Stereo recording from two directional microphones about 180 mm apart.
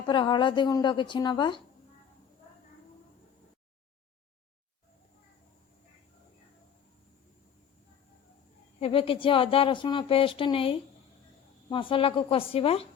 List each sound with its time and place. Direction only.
0.0 s speech: 25° left (ahead or behind)
8.8 s a woman's voice: 30° left (ahead or behind)